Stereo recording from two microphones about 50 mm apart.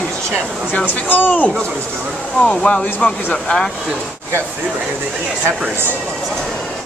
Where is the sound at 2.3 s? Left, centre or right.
Centre.